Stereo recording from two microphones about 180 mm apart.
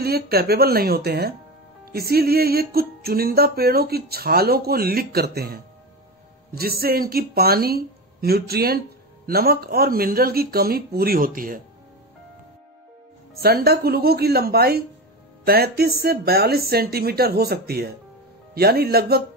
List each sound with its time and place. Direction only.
0.0 s speech: 60° right (ahead or behind)
13.3 s speech: 60° right (ahead or behind)